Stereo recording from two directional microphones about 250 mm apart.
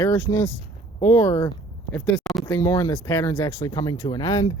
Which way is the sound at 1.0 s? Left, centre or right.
Centre.